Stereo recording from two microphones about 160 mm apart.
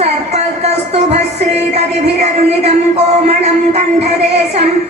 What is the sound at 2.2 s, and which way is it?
Speech, 40° right (ahead or behind).